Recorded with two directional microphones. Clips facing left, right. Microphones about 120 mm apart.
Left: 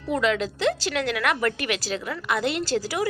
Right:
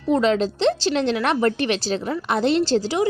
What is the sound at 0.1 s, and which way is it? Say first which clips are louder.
A woman's voice: right 5 dB; 30° right (ahead or behind).